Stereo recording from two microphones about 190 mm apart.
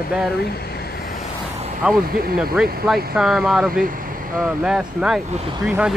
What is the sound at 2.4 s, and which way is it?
Speech, centre (ahead or behind).